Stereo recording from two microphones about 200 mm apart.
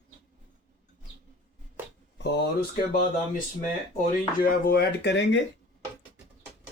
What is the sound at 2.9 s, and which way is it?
Speech, 45° left (ahead or behind).